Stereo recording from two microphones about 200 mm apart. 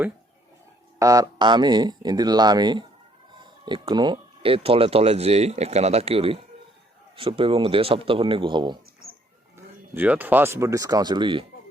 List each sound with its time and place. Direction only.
0.9 s speech: 15° right (ahead or behind)
9.6 s speech: 10° right (ahead or behind)